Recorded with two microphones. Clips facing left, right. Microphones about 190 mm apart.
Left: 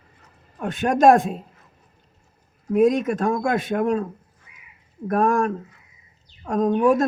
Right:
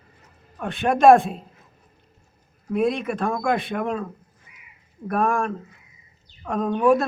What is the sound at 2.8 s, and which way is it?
Speech, 40° left (ahead or behind).